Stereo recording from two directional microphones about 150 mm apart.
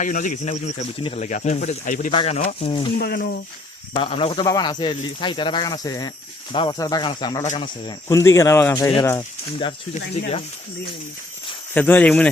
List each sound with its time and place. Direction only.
0.0 s speech: 60° left (ahead or behind)
2.1 s speech: 45° left (ahead or behind)
3.0 s speech: 90° left
3.9 s speech: 35° left (ahead or behind)
8.0 s speech: 20° left (ahead or behind)
9.9 s speech: 45° left (ahead or behind)
11.7 s speech: 10° left (ahead or behind)